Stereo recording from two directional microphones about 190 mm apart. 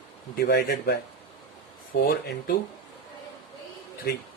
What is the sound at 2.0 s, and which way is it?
Speech, 55° left (ahead or behind).